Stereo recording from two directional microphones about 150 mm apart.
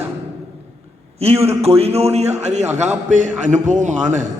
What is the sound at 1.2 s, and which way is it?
A man's voice, 45° right (ahead or behind).